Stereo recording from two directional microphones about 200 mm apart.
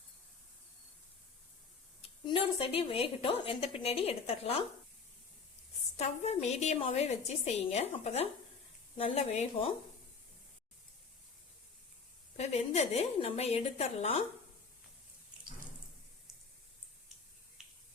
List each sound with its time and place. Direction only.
2.0 s a woman's voice: 25° left (ahead or behind)
6.0 s a woman's voice: 35° left (ahead or behind)
12.4 s a woman's voice: 35° left (ahead or behind)